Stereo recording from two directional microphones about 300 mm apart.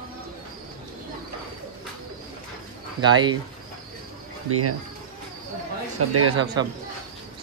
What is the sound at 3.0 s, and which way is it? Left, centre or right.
Speech, centre.